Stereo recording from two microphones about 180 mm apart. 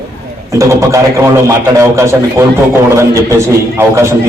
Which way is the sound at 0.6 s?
15° right (ahead or behind).